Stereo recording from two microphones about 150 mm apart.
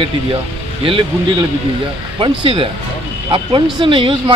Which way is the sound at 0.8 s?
35° right (ahead or behind).